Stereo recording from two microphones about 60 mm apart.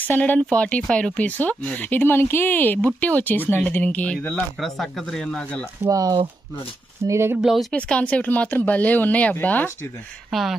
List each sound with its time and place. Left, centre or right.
0.0 s speech: left
1.9 s speech: left
4.3 s speech: centre
5.9 s speech: right
7.1 s speech: right
7.7 s speech: left